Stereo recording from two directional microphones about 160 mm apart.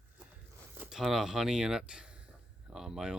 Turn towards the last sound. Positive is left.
turn(degrees=-5)  # may be behind; listen again after turning